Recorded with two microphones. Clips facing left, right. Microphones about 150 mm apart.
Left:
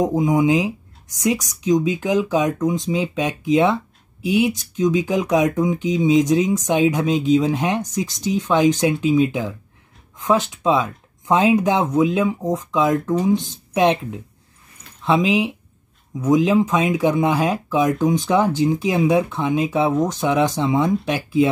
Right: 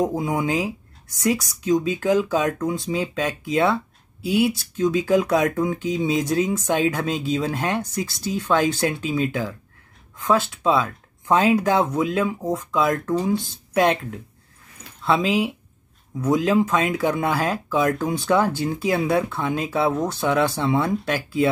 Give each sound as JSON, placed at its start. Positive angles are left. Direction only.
{"t": 0.0, "sound": "speech", "side_deg": 15}
{"t": 15.0, "sound": "speech", "side_deg": 15}